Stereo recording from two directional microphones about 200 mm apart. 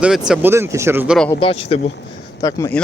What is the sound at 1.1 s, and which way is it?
Speech, 5° left (ahead or behind).